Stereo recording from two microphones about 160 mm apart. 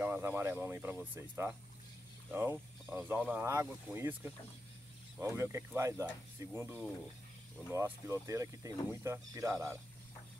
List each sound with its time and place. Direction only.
0.0 s speech: 10° right (ahead or behind)
7.7 s speech: 15° right (ahead or behind)